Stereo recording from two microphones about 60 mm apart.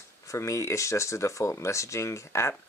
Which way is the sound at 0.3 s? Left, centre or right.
Left.